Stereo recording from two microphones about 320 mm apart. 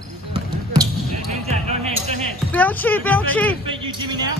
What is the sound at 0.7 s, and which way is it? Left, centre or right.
Basketball bounce, centre.